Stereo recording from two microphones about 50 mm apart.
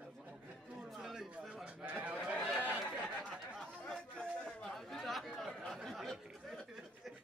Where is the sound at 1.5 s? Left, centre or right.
Right.